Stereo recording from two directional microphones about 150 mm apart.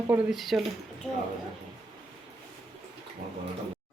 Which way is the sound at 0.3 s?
Centre (ahead or behind).